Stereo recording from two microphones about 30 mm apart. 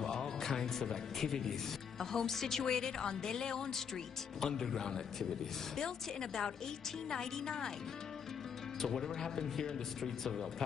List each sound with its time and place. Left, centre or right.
0.0 s a woman's voice: centre
8.8 s a man's voice: centre